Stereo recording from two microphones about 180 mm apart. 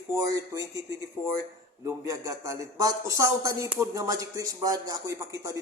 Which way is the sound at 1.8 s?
15° right (ahead or behind).